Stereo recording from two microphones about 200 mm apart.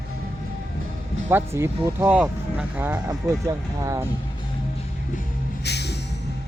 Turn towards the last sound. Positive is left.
turn(degrees=55)  # may be behind; listen again after turning